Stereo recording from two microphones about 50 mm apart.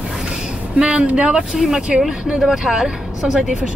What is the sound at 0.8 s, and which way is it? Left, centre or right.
Speech, right.